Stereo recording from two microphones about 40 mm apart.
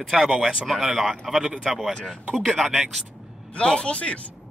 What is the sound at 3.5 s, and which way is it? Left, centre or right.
Speech, left.